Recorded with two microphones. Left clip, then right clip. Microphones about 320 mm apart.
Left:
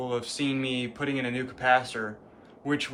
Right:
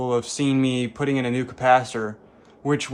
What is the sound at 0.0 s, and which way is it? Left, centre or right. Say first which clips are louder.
Speech: right 7 dB; centre.